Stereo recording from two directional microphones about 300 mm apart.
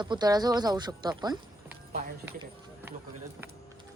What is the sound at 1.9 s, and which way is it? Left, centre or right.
Clip-clop, right.